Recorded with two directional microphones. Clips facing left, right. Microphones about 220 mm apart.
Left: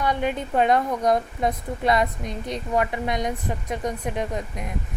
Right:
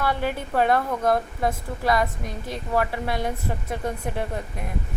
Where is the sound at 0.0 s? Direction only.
20° left (ahead or behind).